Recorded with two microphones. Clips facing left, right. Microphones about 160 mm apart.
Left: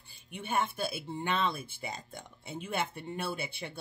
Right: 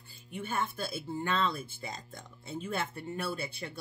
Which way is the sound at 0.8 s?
15° left (ahead or behind).